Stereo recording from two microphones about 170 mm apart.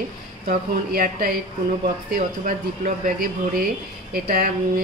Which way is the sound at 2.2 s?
50° right (ahead or behind).